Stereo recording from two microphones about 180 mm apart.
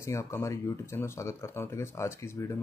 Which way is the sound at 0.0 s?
15° left (ahead or behind).